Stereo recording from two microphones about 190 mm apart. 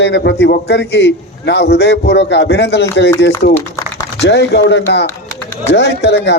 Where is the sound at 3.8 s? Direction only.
15° left (ahead or behind).